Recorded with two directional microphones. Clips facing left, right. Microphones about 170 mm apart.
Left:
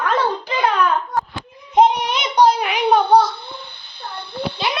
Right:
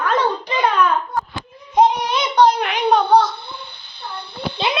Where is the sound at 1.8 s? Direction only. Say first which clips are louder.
Left 1 dB; 15° left (ahead or behind).